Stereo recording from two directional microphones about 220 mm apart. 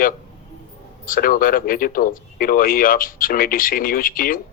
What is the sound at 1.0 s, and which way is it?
Speech, 40° left (ahead or behind).